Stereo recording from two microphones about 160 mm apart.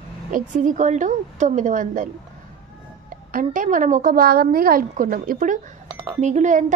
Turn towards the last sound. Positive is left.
turn(degrees=-50)  # may be behind; listen again after turning